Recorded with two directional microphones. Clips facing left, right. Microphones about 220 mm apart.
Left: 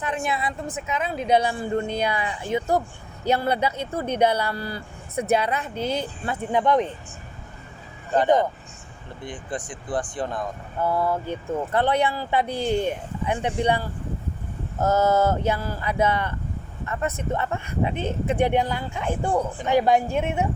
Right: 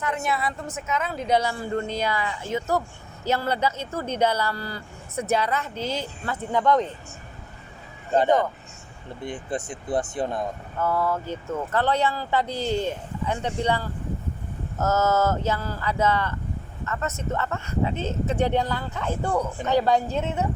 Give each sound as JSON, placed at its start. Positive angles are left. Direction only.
{"t": 0.3, "sound": "speech", "side_deg": 20}
{"t": 9.3, "sound": "speech", "side_deg": -25}
{"t": 10.8, "sound": "speech", "side_deg": 15}